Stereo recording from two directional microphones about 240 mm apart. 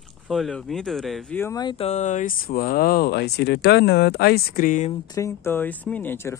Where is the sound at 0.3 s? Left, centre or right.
Centre; by 4.9 s left.